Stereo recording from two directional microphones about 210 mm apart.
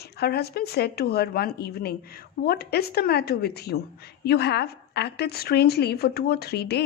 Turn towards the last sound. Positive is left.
turn(degrees=50)  # may be behind; listen again after turning